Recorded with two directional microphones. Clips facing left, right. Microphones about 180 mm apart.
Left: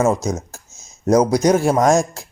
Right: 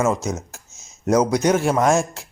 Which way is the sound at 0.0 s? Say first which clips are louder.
Left 3 dB; 35° left (ahead or behind).